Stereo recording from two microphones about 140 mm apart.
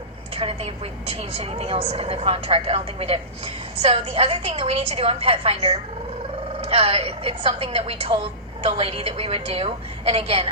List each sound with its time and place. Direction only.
0.3 s a woman's voice: 45° right (ahead or behind)